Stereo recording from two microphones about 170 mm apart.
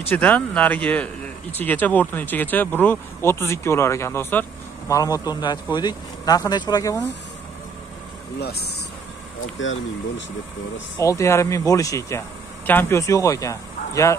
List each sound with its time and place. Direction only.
0.1 s speech: 5° left (ahead or behind)
8.4 s speech: 70° left (ahead or behind)
11.0 s speech: 15° left (ahead or behind)